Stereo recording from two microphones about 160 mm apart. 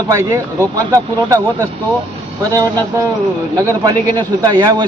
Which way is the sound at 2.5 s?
25° right (ahead or behind).